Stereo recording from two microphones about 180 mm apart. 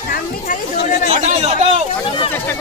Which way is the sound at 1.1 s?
40° right (ahead or behind).